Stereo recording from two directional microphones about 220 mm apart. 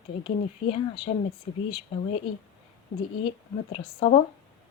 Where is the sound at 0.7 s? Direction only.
25° left (ahead or behind).